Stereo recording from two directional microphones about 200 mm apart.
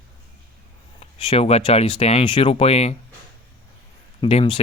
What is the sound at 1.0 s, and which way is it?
Speech, 30° left (ahead or behind).